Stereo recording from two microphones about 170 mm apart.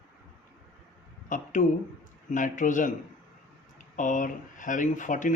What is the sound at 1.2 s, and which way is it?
A man's voice, 50° left (ahead or behind).